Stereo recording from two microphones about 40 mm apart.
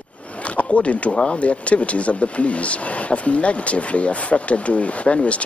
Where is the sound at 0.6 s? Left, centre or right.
Left.